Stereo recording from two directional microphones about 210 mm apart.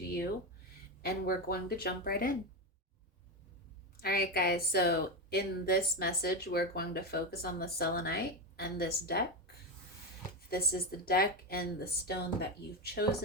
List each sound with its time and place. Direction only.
1.0 s a woman's voice: 45° left (ahead or behind)
4.0 s a woman's voice: 45° left (ahead or behind)
10.5 s a woman's voice: 45° left (ahead or behind)